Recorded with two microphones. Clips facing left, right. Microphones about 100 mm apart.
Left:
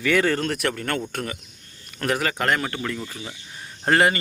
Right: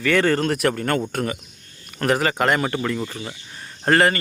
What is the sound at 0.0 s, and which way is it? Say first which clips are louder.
Speech: right 2 dB; 10° left (ahead or behind).